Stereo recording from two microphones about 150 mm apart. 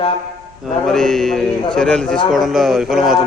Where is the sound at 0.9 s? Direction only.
Centre (ahead or behind).